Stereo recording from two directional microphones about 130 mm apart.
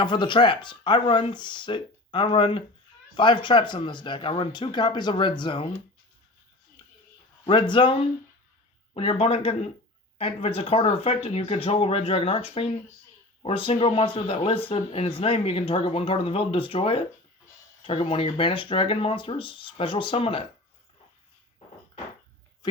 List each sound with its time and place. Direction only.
0.0 s speech: 35° left (ahead or behind)
7.4 s speech: 40° left (ahead or behind)
9.0 s speech: 50° left (ahead or behind)
22.6 s speech: 30° left (ahead or behind)